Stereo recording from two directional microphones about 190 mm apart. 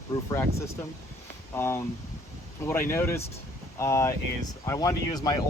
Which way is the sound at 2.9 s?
15° left (ahead or behind).